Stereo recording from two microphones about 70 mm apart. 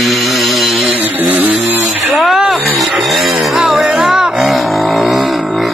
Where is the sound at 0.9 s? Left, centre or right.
Right.